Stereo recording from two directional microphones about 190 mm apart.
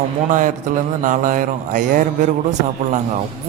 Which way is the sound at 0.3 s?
45° right (ahead or behind).